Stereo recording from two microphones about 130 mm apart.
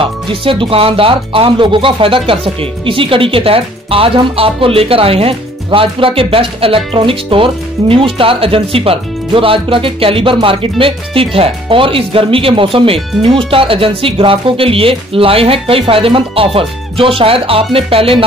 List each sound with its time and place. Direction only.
0.0 s speech: 40° right (ahead or behind)